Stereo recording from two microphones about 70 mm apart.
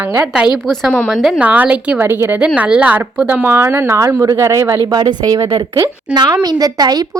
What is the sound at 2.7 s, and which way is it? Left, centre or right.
Speech, right.